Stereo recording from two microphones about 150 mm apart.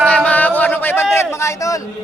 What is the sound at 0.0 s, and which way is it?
Yodeling, 10° left (ahead or behind).